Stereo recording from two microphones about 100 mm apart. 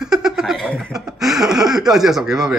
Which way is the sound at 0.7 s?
10° left (ahead or behind).